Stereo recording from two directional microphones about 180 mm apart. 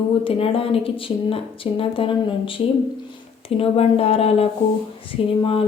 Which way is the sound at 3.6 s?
35° left (ahead or behind).